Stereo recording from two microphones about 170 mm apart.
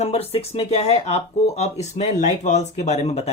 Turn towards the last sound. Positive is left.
turn(degrees=40)  # may be behind; listen again after turning